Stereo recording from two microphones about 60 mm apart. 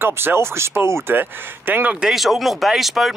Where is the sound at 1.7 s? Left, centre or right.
Right.